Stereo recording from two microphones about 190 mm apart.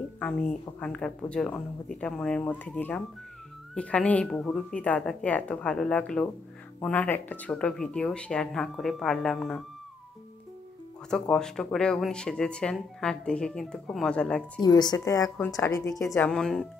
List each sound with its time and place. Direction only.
0.2 s speech: 5° left (ahead or behind)
11.1 s speech: 5° left (ahead or behind)
14.6 s speech: 20° left (ahead or behind)
16.2 s speech: 5° left (ahead or behind)